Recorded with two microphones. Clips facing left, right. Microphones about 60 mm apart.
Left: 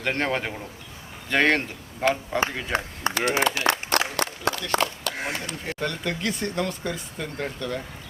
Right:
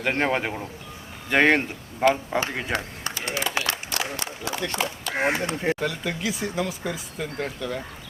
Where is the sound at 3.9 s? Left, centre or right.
Left.